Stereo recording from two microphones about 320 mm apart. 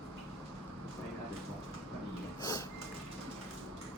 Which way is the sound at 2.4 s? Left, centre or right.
Centre.